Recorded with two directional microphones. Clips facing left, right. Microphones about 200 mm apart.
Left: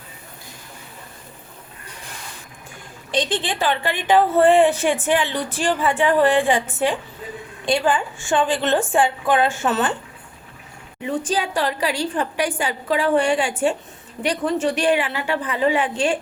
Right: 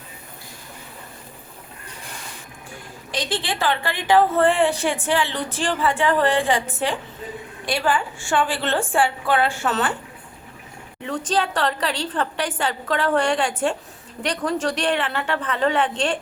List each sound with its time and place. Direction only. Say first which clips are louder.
3.2 s a woman's voice: left 3 dB; 20° left (ahead or behind)
7.6 s a woman's voice: left 3 dB; 20° left (ahead or behind)
11.0 s a woman's voice: left 1 dB; 10° left (ahead or behind)